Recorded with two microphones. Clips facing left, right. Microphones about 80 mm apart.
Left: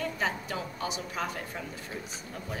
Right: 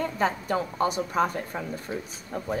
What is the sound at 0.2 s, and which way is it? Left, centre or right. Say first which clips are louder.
A woman's voice: right 7 dB; right.